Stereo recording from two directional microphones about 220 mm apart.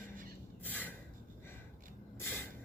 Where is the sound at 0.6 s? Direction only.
10° left (ahead or behind).